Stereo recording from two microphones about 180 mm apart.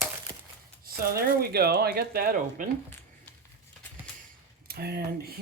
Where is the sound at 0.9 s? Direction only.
55° right (ahead or behind).